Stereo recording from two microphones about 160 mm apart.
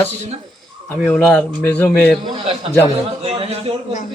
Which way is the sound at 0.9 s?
Centre (ahead or behind).